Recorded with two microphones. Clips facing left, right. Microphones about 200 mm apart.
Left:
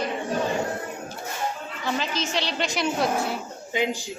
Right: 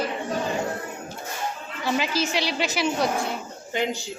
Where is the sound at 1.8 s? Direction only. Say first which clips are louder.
Right 3 dB; 10° right (ahead or behind).